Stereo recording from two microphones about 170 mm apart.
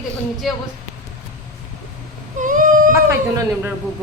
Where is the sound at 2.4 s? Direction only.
50° right (ahead or behind).